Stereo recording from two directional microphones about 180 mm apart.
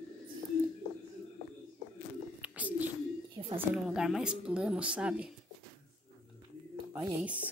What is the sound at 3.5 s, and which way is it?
A woman's voice, 5° right (ahead or behind).